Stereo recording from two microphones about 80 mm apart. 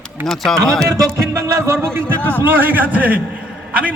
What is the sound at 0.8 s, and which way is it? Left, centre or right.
Speech, right.